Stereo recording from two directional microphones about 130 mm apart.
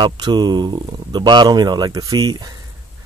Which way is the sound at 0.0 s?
35° right (ahead or behind).